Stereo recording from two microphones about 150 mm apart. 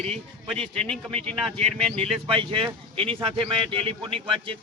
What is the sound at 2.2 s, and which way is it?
A man's voice, 35° right (ahead or behind).